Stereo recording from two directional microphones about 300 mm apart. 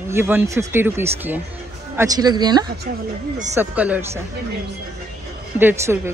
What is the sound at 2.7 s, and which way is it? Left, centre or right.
Speech, right.